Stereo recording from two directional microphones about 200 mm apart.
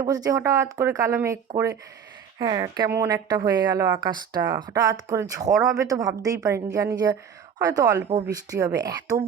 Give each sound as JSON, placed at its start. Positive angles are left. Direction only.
{"t": 0.0, "sound": "a woman's voice", "side_deg": -15}